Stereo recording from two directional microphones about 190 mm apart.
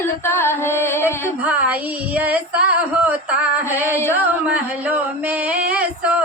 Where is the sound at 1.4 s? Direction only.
5° right (ahead or behind).